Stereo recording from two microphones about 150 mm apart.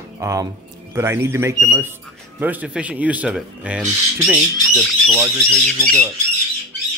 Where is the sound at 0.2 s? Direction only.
20° right (ahead or behind); by 5.2 s centre (ahead or behind).